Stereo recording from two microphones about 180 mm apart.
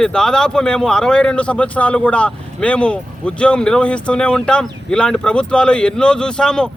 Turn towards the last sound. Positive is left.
turn(degrees=5)  # may be behind; listen again after turning